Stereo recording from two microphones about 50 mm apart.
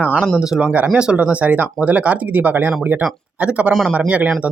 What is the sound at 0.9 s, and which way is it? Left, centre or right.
Speech, right.